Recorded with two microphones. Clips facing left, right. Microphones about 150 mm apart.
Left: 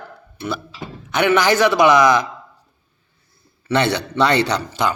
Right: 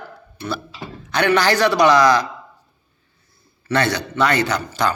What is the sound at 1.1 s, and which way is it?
Speech, 20° left (ahead or behind).